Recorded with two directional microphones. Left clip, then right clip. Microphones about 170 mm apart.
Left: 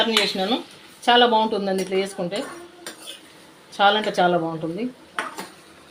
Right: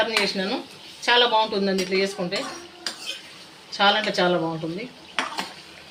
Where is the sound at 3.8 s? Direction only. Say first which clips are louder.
Left 2 dB; 50° left (ahead or behind).